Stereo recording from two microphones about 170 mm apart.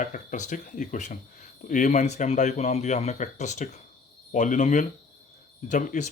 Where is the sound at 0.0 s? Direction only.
45° left (ahead or behind).